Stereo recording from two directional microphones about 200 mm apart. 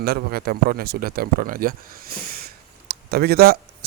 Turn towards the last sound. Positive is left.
turn(degrees=-50)  # may be behind; listen again after turning